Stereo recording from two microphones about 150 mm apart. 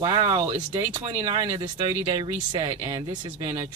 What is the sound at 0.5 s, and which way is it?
Speech, 45° right (ahead or behind).